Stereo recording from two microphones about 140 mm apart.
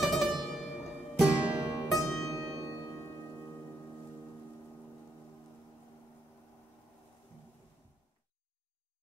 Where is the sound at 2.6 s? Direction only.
25° left (ahead or behind).